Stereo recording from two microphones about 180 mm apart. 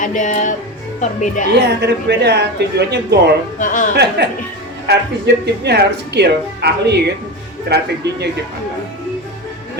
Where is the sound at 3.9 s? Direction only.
70° right (ahead or behind).